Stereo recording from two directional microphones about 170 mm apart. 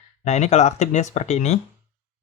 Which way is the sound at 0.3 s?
40° left (ahead or behind).